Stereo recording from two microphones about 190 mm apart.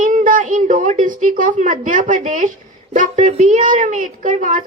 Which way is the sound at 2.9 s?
40° right (ahead or behind).